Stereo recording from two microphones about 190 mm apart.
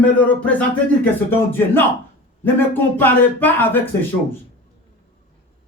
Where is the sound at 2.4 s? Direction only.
10° left (ahead or behind).